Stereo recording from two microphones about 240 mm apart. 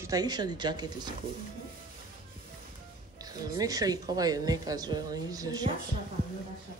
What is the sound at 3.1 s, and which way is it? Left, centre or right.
Speech, centre.